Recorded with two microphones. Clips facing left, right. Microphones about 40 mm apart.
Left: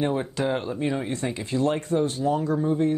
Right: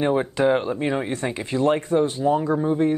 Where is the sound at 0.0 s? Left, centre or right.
Right.